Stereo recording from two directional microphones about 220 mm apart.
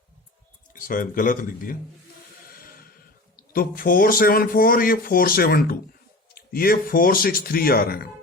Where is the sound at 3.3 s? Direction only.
40° left (ahead or behind).